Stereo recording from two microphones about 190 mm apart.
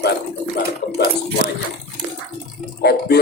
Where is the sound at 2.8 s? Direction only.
55° left (ahead or behind).